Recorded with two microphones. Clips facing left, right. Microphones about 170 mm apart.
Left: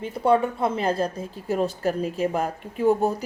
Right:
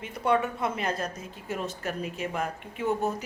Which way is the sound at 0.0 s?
30° left (ahead or behind).